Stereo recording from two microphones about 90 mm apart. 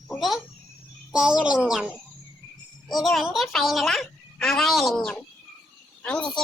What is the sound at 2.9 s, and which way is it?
A child's voice, centre (ahead or behind).